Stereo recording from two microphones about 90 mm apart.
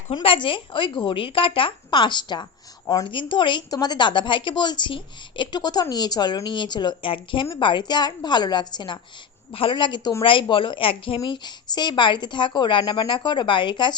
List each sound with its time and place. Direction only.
0.1 s speech: 75° left (ahead or behind); by 2.5 s 60° left (ahead or behind)
2.8 s a woman's voice: 40° left (ahead or behind)
3.1 s a woman's voice: 65° left (ahead or behind)
3.7 s a woman's voice: 50° left (ahead or behind)
7.1 s a woman's voice: 70° left (ahead or behind)
9.5 s a woman's voice: 80° left; by 10.1 s 60° left (ahead or behind)
10.5 s speech: 70° left (ahead or behind)
11.2 s a woman's voice: 50° left (ahead or behind)